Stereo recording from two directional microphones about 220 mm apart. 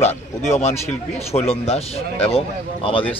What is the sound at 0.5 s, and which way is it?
Speech, 30° left (ahead or behind).